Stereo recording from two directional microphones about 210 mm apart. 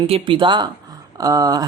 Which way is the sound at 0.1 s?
25° right (ahead or behind).